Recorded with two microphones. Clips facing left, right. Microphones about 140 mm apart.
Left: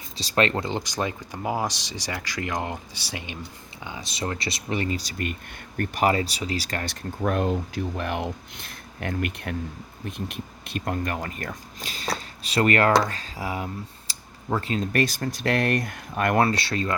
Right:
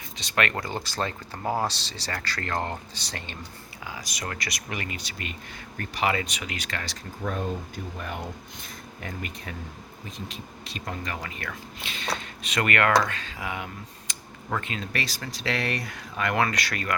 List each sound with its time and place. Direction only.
0.2 s speech: 30° left (ahead or behind); by 3.3 s 10° left (ahead or behind)
3.8 s speech: 25° left (ahead or behind); by 16.5 s 45° left (ahead or behind)
16.5 s speech: 30° left (ahead or behind)